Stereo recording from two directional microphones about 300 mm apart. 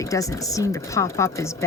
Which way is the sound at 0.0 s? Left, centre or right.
Centre.